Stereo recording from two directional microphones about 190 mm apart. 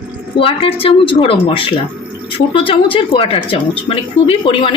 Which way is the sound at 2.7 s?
25° left (ahead or behind).